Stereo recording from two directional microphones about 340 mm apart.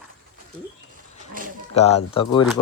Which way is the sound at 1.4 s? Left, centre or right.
Right.